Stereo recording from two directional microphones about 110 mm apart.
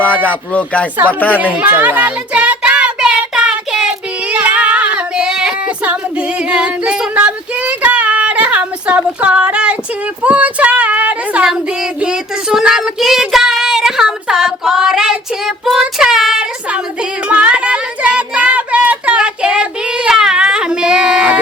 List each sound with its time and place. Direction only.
0.0 s speech: 15° left (ahead or behind)
1.5 s child singing: 15° right (ahead or behind)